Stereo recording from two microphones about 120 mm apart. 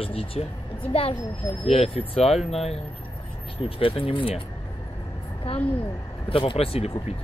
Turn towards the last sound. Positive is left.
turn(degrees=55)  # may be behind; listen again after turning